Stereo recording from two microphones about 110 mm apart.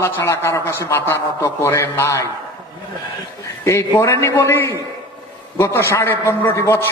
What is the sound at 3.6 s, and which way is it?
A man's voice, 25° left (ahead or behind).